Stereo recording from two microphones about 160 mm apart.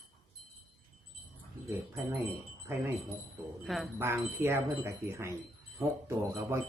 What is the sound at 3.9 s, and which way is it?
Speech, 15° right (ahead or behind).